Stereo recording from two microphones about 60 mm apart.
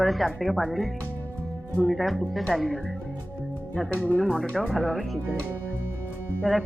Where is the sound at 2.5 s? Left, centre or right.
Centre.